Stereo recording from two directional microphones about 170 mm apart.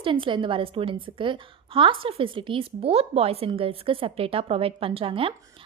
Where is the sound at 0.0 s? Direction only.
30° right (ahead or behind).